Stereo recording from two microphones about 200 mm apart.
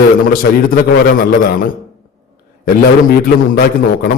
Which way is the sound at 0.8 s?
45° left (ahead or behind).